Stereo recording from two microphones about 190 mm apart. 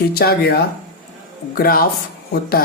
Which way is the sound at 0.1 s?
55° left (ahead or behind).